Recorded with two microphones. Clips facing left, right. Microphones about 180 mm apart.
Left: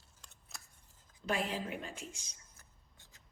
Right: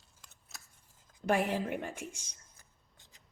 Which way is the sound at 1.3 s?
60° right (ahead or behind).